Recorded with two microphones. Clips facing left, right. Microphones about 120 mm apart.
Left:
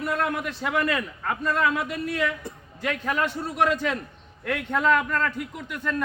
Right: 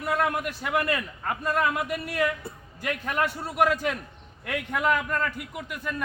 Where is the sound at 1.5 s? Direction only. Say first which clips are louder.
Left 1 dB; 55° right (ahead or behind).